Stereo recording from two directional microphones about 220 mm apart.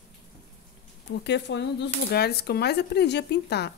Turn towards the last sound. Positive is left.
turn(degrees=50)  # may be behind; listen again after turning